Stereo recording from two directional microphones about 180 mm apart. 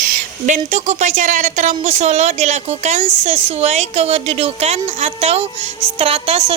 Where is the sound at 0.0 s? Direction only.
40° right (ahead or behind).